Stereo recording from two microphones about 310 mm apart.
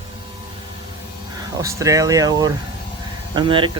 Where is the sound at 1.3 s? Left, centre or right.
Centre.